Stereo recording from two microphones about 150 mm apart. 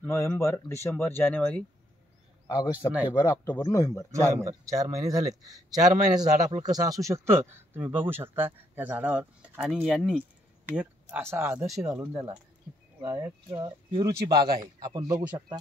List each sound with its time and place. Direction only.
0.0 s speech: 15° left (ahead or behind)
2.4 s a man's voice: 30° left (ahead or behind)
4.1 s a man's voice: 20° right (ahead or behind)
11.6 s speech: centre (ahead or behind)
12.1 s a man's voice: 30° right (ahead or behind)
13.6 s a man's voice: 30° right (ahead or behind)